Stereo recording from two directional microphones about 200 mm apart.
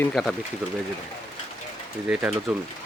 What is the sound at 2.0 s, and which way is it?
Speech, 5° right (ahead or behind).